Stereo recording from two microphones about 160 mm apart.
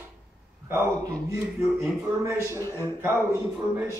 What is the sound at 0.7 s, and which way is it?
A man's voice, 15° right (ahead or behind).